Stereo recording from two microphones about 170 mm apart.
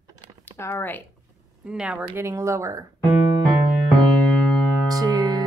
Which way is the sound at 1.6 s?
5° right (ahead or behind).